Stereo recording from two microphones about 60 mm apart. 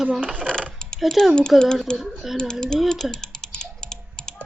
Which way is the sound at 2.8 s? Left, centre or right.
Centre.